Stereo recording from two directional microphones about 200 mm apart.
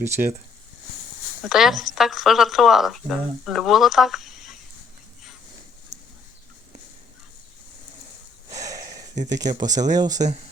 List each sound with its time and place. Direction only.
0.0 s speech: 10° right (ahead or behind)
1.4 s speech: centre (ahead or behind)
8.4 s snort: 15° right (ahead or behind)
9.4 s speech: 20° right (ahead or behind)